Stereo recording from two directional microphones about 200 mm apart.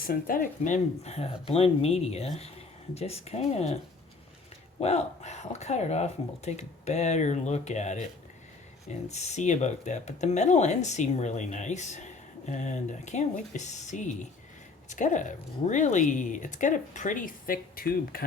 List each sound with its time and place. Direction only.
0.0 s speech: 45° left (ahead or behind)
4.8 s speech: 35° left (ahead or behind)